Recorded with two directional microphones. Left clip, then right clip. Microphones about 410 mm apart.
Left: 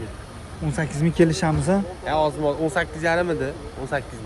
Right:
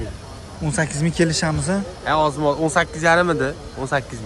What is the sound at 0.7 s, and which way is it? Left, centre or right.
Speech, centre.